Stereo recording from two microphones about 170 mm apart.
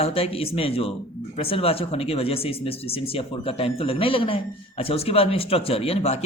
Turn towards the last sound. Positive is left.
turn(degrees=35)  # may be behind; listen again after turning